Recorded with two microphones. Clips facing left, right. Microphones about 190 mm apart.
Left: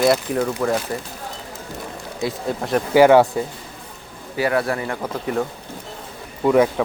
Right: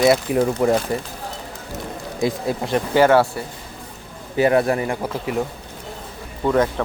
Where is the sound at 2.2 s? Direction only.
10° right (ahead or behind).